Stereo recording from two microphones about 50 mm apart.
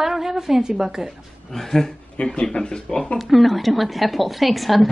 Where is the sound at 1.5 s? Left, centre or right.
Centre.